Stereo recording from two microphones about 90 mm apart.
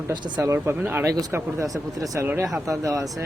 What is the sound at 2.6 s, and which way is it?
Speech, 40° right (ahead or behind).